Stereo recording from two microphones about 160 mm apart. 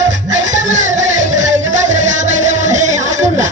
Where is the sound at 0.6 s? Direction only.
50° right (ahead or behind).